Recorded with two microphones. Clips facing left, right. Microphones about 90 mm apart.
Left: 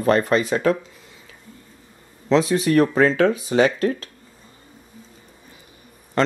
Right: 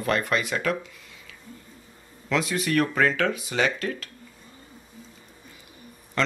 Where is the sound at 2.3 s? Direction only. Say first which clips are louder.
Left 7 dB; 35° left (ahead or behind).